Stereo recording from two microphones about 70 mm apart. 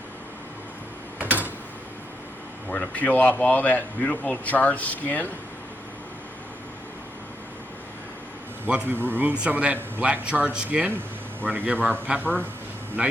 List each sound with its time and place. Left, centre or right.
1.2 s a sound: right
2.6 s speech: left
8.9 s a man's voice: right